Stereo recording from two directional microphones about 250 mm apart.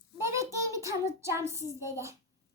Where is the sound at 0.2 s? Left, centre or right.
Centre.